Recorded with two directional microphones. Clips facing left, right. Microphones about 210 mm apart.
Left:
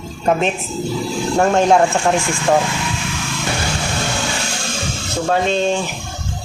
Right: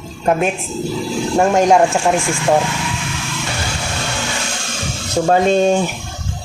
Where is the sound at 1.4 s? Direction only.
10° right (ahead or behind).